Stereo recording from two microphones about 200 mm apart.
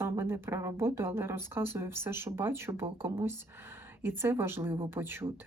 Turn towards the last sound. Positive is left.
turn(degrees=-10)  # may be behind; listen again after turning